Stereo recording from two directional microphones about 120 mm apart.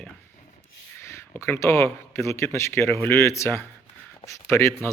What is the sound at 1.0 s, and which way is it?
Speech, 20° left (ahead or behind).